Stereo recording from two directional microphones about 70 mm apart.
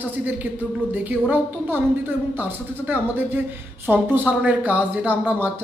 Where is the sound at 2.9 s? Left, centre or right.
Right.